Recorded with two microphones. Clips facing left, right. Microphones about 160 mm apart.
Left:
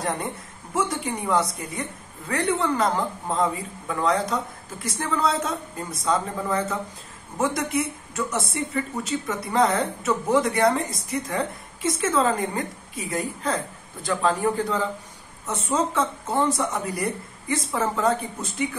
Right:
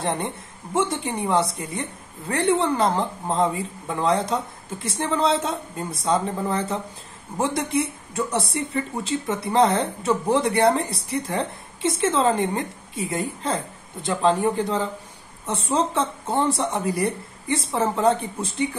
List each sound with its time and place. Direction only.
0.0 s speech: 30° right (ahead or behind)